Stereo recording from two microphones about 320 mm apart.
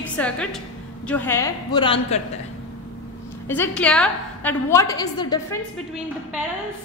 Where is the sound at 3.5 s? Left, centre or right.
Centre.